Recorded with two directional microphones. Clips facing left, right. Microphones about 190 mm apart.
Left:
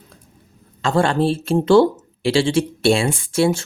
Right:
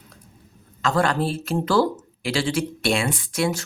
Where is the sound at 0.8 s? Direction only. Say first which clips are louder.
Left 4 dB; 30° left (ahead or behind).